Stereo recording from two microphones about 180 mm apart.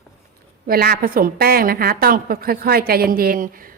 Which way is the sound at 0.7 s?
60° right (ahead or behind).